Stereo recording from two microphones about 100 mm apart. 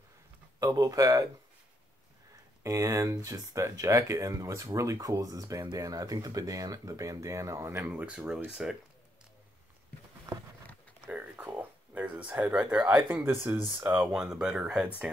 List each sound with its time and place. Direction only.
0.6 s speech: 35° right (ahead or behind)
2.6 s speech: 30° right (ahead or behind)
7.9 s speech: 10° right (ahead or behind)
11.1 s a sound: 15° right (ahead or behind)
12.5 s speech: 10° right (ahead or behind)
13.9 s speech: 5° right (ahead or behind)